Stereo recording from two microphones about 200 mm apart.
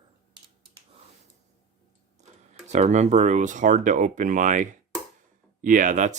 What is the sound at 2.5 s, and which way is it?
Speech, 35° right (ahead or behind).